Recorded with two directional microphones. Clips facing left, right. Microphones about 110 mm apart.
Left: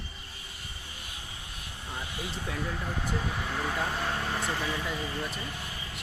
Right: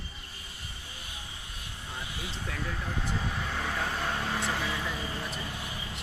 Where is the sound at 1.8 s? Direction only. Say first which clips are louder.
Left 2 dB; 20° left (ahead or behind); by 4.8 s centre (ahead or behind).